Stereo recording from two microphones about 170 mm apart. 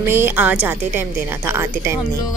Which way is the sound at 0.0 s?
15° right (ahead or behind).